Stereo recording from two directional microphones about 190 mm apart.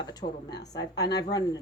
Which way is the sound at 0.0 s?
20° left (ahead or behind).